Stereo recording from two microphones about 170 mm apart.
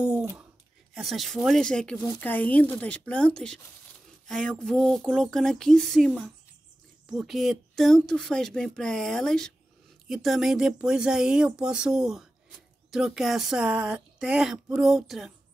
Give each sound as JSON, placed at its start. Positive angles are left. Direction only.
{"t": 0.9, "sound": "speech", "side_deg": 0}
{"t": 2.0, "sound": "speech", "side_deg": 20}
{"t": 2.2, "sound": "speech", "side_deg": 10}